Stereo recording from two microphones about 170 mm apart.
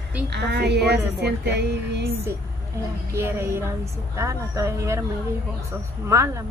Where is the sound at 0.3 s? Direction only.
85° right.